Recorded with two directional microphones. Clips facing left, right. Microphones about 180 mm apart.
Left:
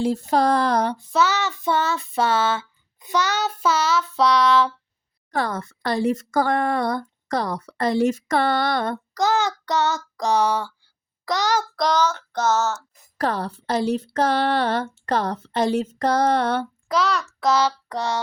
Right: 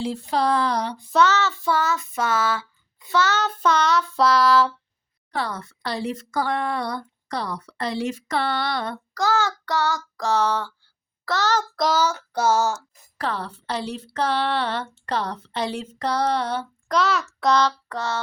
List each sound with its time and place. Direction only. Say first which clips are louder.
0.0 s speech: left 4 dB; 45° left (ahead or behind)
1.1 s child singing: right 4 dB; 10° left (ahead or behind); by 2.6 s 25° left (ahead or behind)
3.1 s child singing: right 1 dB; 15° left (ahead or behind); by 4.7 s centre (ahead or behind)
5.3 s speech: left 3 dB; 45° left (ahead or behind)
9.1 s child singing: left 1 dB; 20° left (ahead or behind)
11.8 s child singing: left 1 dB; 5° right (ahead or behind)
13.1 s speech: left 4 dB; 45° left (ahead or behind)
16.9 s child singing: even; centre (ahead or behind); by 18.2 s 15° left (ahead or behind)